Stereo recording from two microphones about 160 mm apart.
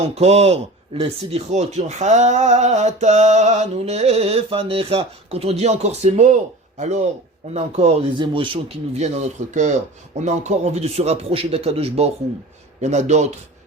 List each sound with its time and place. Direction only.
0.1 s a man's voice: 40° right (ahead or behind)
9.0 s a man's voice: 45° right (ahead or behind)